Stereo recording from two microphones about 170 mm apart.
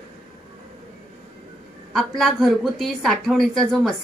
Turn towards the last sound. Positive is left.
turn(degrees=0)  # may be behind; listen again after turning